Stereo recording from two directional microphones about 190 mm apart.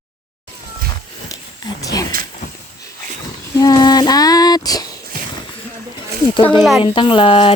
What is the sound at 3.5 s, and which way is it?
Female singing, 20° left (ahead or behind).